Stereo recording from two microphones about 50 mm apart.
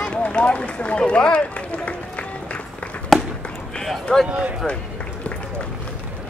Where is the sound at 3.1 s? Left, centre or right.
Centre.